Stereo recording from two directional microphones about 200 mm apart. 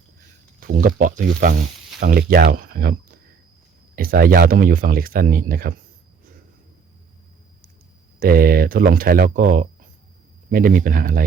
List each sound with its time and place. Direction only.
0.7 s speech: 45° right (ahead or behind)
3.9 s speech: 45° right (ahead or behind)
8.2 s speech: 45° right (ahead or behind)